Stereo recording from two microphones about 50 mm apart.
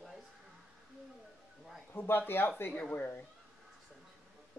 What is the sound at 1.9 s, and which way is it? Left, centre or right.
Speech, left.